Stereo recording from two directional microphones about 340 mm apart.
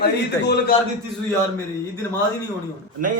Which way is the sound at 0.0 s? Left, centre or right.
Left.